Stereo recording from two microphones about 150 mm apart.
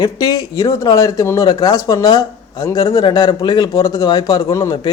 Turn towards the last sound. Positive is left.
turn(degrees=25)  # may be behind; listen again after turning